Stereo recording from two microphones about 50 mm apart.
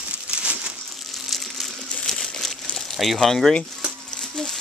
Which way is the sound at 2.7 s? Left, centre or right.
Centre.